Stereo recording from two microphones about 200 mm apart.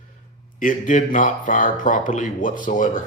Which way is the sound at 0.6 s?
40° left (ahead or behind).